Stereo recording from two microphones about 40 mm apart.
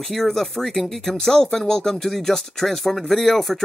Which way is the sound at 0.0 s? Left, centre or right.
Centre.